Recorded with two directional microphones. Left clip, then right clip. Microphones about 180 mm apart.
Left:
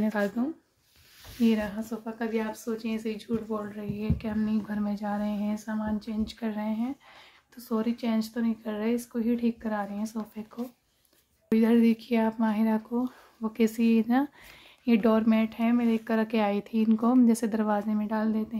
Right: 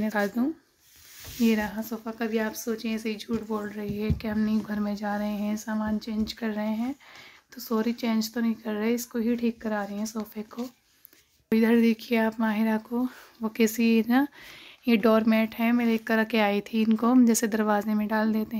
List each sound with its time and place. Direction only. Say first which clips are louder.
0.1 s speech: right 2 dB; 25° right (ahead or behind)
11.5 s speech: right 1 dB; 20° right (ahead or behind)